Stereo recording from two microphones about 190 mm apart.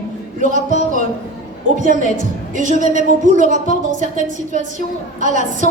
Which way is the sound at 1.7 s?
45° right (ahead or behind).